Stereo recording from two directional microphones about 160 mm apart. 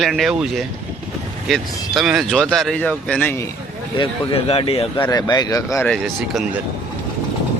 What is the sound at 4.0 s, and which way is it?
Speech, 35° left (ahead or behind).